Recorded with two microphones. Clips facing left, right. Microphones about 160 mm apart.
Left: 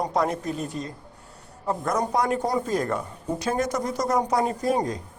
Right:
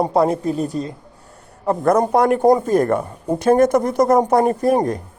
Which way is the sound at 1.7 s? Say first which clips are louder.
Right 9 dB; 60° right (ahead or behind).